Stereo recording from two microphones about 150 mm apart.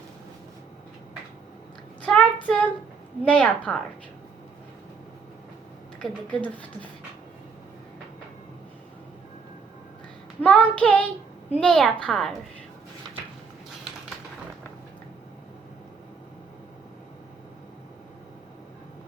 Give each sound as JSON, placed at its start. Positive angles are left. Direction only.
{"t": 2.0, "sound": "child singing", "side_deg": 5}
{"t": 6.0, "sound": "child singing", "side_deg": 10}
{"t": 10.4, "sound": "child singing", "side_deg": 10}
{"t": 11.6, "sound": "a woman's voice", "side_deg": 5}